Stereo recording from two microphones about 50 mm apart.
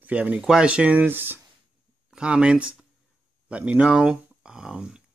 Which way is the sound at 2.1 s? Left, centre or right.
Centre.